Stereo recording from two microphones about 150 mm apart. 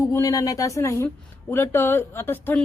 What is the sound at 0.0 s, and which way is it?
Speech, 20° left (ahead or behind).